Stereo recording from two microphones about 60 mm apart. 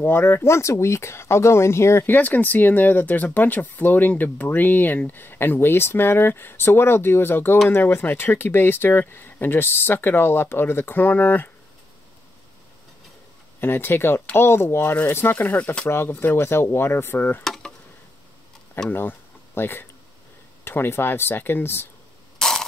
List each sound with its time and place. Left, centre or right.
0.0 s speech: left
0.5 s speech: left
2.0 s speech: left
13.6 s speech: left
15.3 s speech: left
15.8 s speech: left
17.4 s dishes: centre
18.9 s speech: left
22.4 s a sound: centre